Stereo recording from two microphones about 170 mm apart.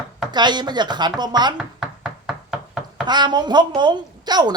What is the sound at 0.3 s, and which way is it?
A woman's voice, 25° right (ahead or behind).